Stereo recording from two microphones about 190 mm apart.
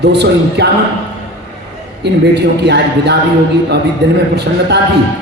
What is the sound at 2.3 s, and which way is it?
Speech, 60° right (ahead or behind).